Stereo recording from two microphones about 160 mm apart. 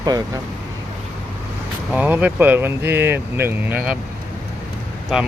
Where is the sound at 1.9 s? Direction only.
10° right (ahead or behind).